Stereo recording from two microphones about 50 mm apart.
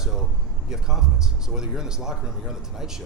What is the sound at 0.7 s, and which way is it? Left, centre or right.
A man's voice, centre.